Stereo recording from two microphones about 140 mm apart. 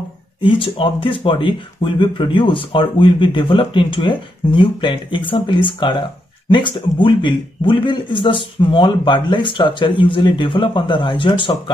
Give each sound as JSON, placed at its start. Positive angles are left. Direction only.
{"t": 0.4, "sound": "speech", "side_deg": 40}